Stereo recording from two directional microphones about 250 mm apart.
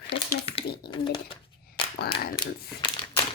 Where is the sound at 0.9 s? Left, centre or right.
Centre.